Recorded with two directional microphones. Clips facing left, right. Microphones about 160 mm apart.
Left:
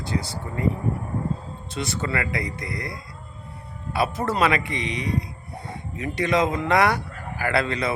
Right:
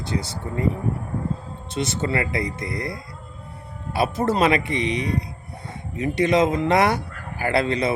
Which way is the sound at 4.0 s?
25° right (ahead or behind).